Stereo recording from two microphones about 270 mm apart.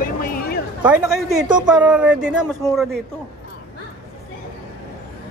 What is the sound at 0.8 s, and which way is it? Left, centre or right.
Speech, centre.